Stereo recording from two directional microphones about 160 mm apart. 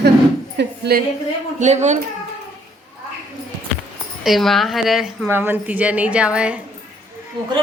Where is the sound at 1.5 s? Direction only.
45° right (ahead or behind).